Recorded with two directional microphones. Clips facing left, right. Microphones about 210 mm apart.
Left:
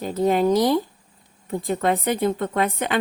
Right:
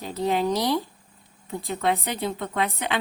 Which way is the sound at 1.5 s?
45° left (ahead or behind).